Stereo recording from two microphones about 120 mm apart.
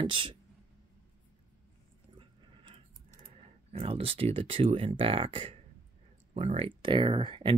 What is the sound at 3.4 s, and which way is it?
Speech, 55° right (ahead or behind).